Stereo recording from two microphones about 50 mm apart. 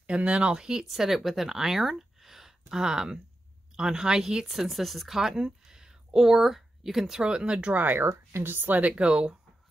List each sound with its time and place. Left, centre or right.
0.0 s speech: right
7.7 s speech: right
8.1 s speech: right; by 9.4 s centre